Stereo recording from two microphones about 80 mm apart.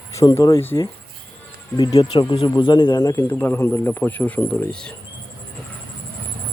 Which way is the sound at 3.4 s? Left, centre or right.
Left.